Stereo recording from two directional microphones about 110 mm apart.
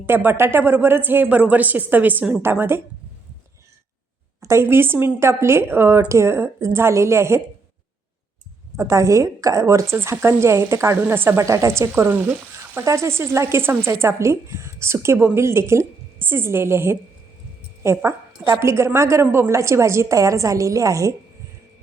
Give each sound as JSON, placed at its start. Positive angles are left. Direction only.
{"t": 0.0, "sound": "speech", "side_deg": -20}
{"t": 4.4, "sound": "speech", "side_deg": -25}
{"t": 8.7, "sound": "speech", "side_deg": -30}
{"t": 18.0, "sound": "speech", "side_deg": -25}